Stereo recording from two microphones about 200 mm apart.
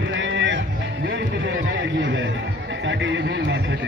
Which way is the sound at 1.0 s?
65° right (ahead or behind).